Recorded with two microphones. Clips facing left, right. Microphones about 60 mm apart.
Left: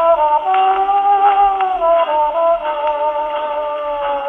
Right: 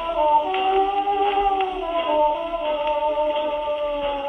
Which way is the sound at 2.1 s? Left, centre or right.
Left.